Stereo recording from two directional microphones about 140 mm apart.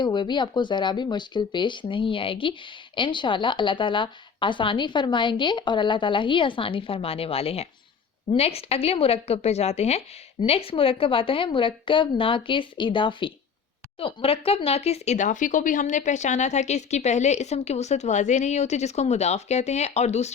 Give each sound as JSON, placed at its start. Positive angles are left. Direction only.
{"t": 0.0, "sound": "speech", "side_deg": 35}